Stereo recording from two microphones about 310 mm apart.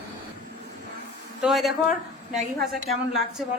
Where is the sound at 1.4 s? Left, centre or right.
Centre.